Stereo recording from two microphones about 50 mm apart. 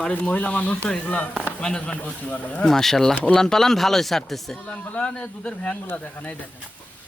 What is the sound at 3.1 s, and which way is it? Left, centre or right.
Speech, left.